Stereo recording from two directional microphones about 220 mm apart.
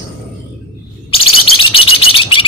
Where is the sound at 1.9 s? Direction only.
25° left (ahead or behind).